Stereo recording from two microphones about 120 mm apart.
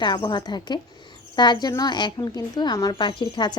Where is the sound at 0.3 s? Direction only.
40° left (ahead or behind).